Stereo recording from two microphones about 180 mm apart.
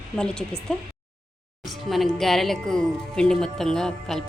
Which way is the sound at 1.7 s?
Centre (ahead or behind).